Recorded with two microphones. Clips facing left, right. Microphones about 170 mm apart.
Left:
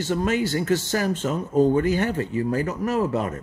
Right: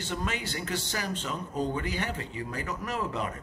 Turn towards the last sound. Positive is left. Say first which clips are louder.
# left 9 dB
turn(degrees=45)  # may be behind; listen again after turning